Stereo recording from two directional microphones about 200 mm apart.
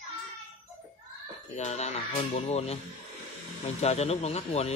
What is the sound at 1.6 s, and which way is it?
Speech, 35° left (ahead or behind).